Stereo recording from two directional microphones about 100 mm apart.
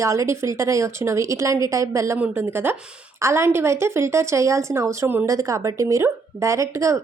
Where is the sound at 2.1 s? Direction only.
20° right (ahead or behind).